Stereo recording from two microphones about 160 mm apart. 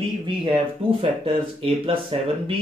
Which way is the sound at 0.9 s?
35° right (ahead or behind).